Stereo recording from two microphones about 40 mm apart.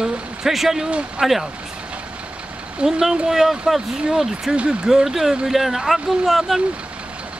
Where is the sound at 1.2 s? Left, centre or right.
Centre.